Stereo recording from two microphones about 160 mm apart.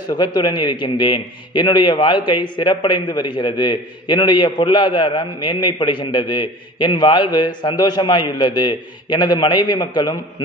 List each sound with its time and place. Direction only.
0.1 s a man's voice: 25° left (ahead or behind)